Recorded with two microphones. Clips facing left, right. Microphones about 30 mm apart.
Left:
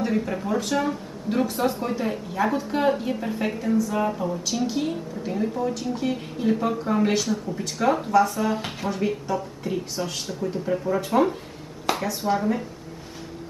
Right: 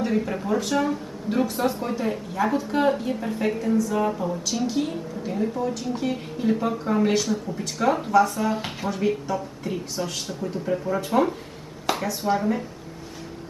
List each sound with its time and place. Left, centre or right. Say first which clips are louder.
0.0 s speech: even; centre